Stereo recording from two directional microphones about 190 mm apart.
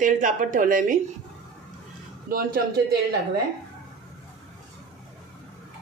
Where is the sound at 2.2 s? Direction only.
50° right (ahead or behind).